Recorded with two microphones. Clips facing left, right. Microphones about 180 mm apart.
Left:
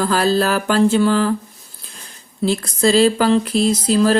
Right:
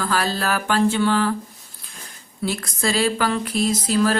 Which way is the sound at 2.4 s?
30° left (ahead or behind).